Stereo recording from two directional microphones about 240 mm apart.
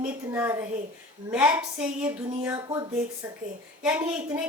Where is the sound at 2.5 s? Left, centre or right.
Centre.